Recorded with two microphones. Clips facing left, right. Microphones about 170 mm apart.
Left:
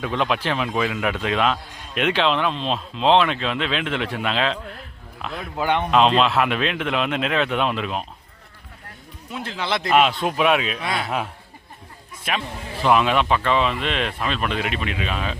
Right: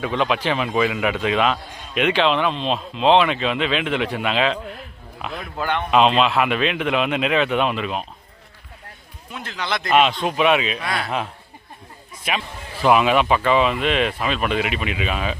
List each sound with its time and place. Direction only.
0.0 s speech: centre (ahead or behind)
5.5 s speech: 10° left (ahead or behind)
5.9 s speech: 5° right (ahead or behind)
9.3 s speech: 30° left (ahead or behind)
9.8 s speech: 5° left (ahead or behind)